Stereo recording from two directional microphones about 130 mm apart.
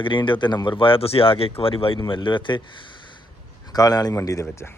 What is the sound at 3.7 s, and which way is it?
Speech, 30° left (ahead or behind).